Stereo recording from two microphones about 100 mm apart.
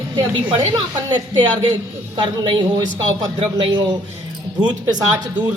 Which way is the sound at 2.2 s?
45° right (ahead or behind).